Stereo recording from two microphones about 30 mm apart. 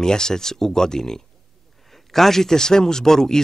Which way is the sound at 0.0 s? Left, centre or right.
Centre.